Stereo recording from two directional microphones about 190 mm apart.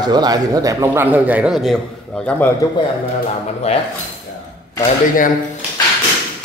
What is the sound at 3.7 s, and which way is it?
Speech, 35° left (ahead or behind).